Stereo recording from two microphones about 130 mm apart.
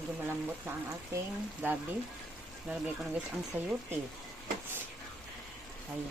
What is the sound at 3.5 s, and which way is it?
Speech, 15° right (ahead or behind).